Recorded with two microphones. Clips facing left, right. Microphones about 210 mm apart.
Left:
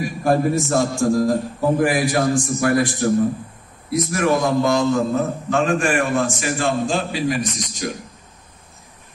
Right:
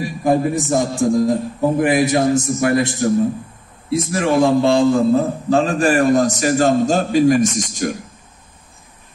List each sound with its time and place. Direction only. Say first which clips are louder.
0.2 s a man's voice: right 1 dB; 15° right (ahead or behind); by 8.0 s 50° right (ahead or behind)